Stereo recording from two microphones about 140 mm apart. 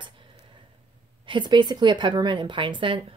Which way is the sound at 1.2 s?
35° right (ahead or behind).